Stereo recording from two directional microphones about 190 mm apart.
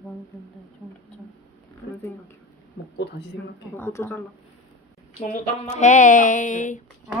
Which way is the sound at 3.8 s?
10° left (ahead or behind).